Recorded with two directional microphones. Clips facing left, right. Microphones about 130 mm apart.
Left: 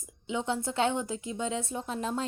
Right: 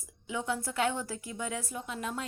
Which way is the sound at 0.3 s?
25° left (ahead or behind).